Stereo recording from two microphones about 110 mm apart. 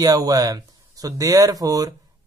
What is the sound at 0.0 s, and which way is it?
Speech, 35° right (ahead or behind).